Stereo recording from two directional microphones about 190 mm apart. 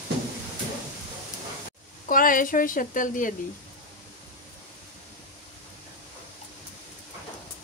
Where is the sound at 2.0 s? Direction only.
45° left (ahead or behind).